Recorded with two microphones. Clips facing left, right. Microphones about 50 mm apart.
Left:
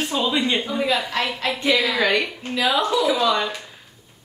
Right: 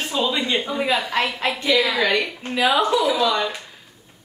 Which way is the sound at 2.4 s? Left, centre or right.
Centre.